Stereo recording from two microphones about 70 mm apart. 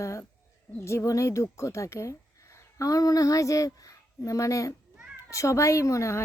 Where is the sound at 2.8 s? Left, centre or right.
Left.